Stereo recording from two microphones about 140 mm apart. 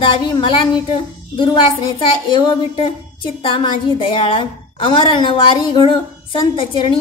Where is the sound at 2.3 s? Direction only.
35° left (ahead or behind).